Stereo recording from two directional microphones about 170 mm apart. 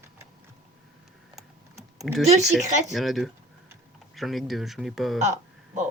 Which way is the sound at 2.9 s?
Centre (ahead or behind).